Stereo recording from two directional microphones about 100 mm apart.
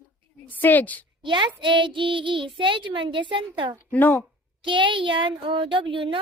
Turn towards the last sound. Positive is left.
turn(degrees=-60)  # may be behind; listen again after turning